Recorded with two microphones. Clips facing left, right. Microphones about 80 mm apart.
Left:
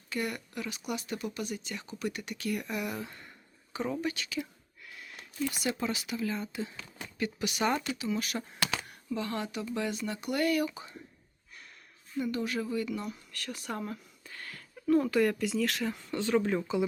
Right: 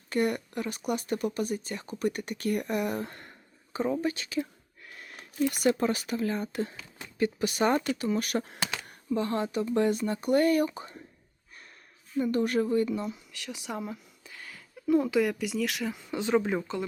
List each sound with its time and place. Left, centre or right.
0.1 s speech: right
4.0 s speech: right
4.9 s a sound: right
5.5 s speech: right
7.2 s speech: right
7.9 s speech: right
9.0 s speech: right
12.2 s speech: right; by 16.6 s centre